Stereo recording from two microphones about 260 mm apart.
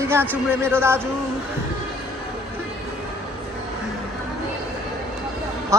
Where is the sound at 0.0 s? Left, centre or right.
Centre.